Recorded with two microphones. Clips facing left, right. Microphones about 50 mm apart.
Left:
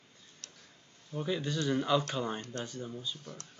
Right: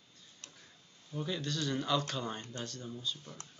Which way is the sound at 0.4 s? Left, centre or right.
Right.